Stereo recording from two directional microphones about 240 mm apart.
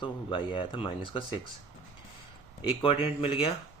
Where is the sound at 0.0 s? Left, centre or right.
Left.